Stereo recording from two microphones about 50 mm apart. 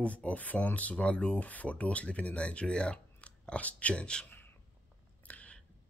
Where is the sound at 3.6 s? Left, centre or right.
Left.